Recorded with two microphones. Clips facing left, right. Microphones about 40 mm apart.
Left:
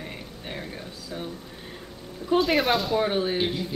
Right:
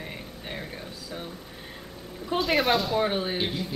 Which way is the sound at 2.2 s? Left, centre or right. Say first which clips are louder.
Left 2 dB; centre.